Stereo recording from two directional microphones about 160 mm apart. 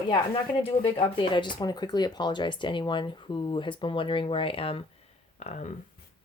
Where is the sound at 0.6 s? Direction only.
35° left (ahead or behind).